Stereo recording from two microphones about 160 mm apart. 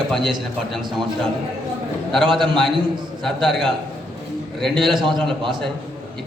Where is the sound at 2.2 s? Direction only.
30° right (ahead or behind).